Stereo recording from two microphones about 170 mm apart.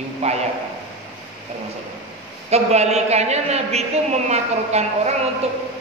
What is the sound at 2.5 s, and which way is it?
A man's voice, 40° right (ahead or behind).